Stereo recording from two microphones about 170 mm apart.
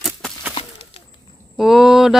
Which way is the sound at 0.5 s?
35° left (ahead or behind).